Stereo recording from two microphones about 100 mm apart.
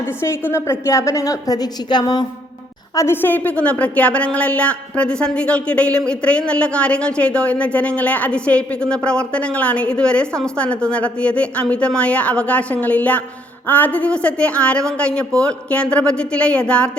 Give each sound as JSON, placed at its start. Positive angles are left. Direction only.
{"t": 0.2, "sound": "a woman's voice", "side_deg": 25}
{"t": 2.9, "sound": "a woman's voice", "side_deg": 25}